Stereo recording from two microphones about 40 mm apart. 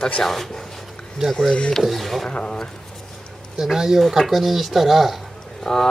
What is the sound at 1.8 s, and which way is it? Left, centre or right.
Speech, centre.